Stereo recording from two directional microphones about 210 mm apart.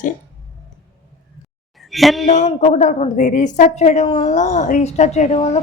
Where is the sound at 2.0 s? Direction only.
Centre (ahead or behind).